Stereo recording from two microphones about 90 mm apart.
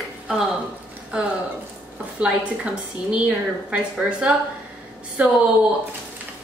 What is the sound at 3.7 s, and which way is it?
A woman's voice, 10° right (ahead or behind).